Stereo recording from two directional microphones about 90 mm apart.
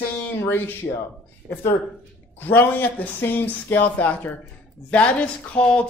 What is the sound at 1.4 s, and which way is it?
Speech, 20° right (ahead or behind).